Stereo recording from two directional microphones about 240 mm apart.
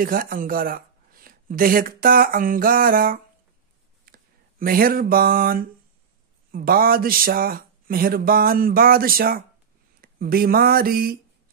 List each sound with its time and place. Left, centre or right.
0.0 s speech: right
4.0 s a sound: right
6.5 s speech: right